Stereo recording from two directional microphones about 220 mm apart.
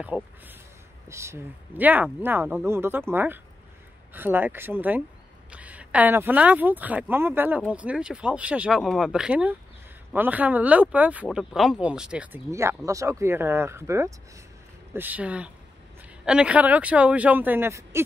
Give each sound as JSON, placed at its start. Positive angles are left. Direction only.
{"t": 0.0, "sound": "speech", "side_deg": -5}